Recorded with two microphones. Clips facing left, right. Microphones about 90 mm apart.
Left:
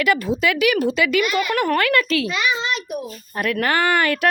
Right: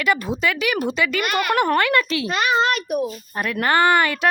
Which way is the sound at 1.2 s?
55° right (ahead or behind).